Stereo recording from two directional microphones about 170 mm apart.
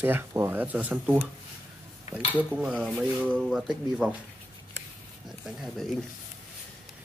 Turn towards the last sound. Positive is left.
turn(degrees=0)  # may be behind; listen again after turning